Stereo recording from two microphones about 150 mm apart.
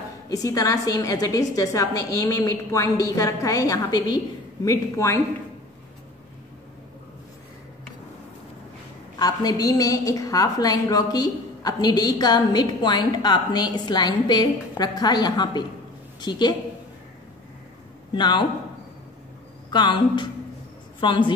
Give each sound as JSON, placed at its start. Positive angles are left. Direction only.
{"t": 0.3, "sound": "a woman's voice", "side_deg": 25}
{"t": 9.1, "sound": "a woman's voice", "side_deg": 25}
{"t": 18.1, "sound": "speech", "side_deg": 30}
{"t": 19.7, "sound": "a woman's voice", "side_deg": 30}